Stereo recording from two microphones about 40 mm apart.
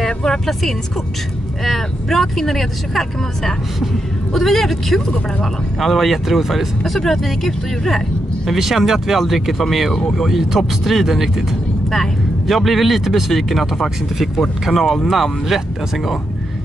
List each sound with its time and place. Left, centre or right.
0.0 s vehicle: centre
0.5 s speech: centre
6.8 s speech: centre
8.5 s speech: centre
9.9 s speech: centre
10.2 s speech: centre
12.4 s speech: centre